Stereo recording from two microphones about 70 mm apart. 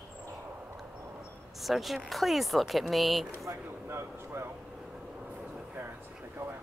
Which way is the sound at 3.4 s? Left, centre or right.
Right.